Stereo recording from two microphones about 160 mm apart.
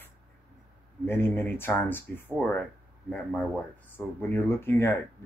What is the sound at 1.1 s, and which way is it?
Speech, 15° left (ahead or behind).